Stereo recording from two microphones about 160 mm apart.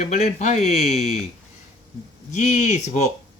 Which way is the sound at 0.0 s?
45° left (ahead or behind).